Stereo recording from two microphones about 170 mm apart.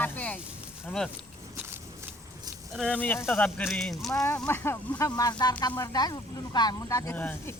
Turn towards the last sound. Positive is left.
turn(degrees=10)  # may be behind; listen again after turning